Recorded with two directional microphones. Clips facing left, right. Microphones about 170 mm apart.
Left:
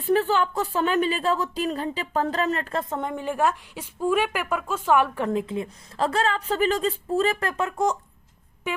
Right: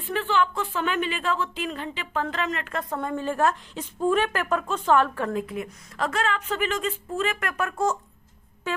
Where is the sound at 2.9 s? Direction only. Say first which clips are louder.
Right 4 dB; 15° left (ahead or behind).